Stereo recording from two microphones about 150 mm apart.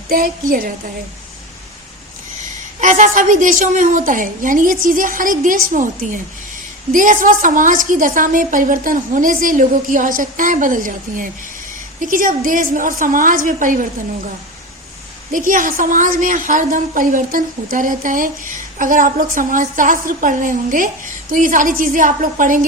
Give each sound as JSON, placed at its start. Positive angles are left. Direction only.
{"t": 0.1, "sound": "a woman's voice", "side_deg": -70}
{"t": 2.8, "sound": "a woman's voice", "side_deg": -60}
{"t": 15.3, "sound": "a woman's voice", "side_deg": -65}